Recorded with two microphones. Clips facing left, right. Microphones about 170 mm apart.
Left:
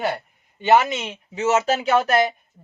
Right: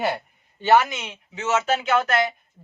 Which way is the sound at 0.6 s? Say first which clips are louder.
Left 1 dB; 20° left (ahead or behind).